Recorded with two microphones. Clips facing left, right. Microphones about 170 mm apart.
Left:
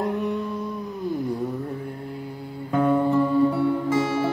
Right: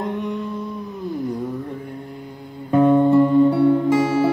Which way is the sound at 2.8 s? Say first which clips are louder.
Right 6 dB; 20° right (ahead or behind).